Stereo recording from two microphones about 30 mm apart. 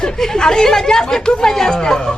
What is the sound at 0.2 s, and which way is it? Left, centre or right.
Speech, centre.